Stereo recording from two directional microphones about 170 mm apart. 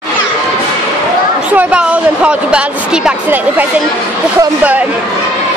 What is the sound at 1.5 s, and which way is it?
A woman's voice, 5° right (ahead or behind).